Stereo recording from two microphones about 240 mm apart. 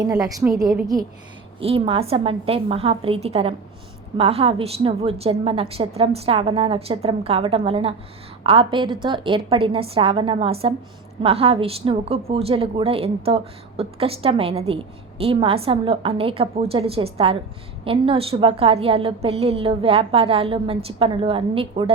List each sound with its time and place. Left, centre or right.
0.1 s a woman's voice: centre